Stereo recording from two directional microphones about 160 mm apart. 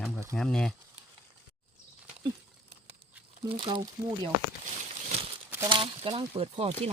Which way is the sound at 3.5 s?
30° right (ahead or behind).